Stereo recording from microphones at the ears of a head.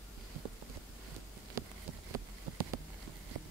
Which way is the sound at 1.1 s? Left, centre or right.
Right.